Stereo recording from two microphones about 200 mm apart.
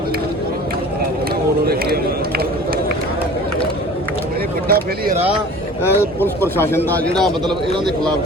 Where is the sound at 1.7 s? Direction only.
50° right (ahead or behind).